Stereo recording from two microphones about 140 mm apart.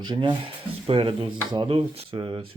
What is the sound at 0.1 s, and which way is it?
Speech, 35° right (ahead or behind).